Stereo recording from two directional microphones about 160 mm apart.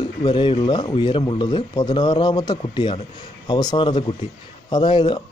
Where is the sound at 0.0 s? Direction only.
30° left (ahead or behind).